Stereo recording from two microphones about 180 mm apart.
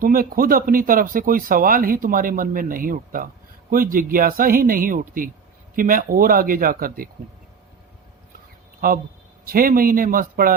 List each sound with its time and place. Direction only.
0.0 s speech: 55° right (ahead or behind)
8.8 s speech: 55° right (ahead or behind)